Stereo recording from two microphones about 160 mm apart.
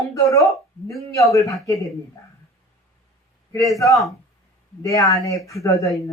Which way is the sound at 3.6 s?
20° left (ahead or behind).